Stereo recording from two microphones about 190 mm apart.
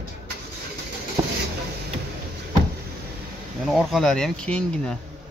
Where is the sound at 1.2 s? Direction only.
15° right (ahead or behind).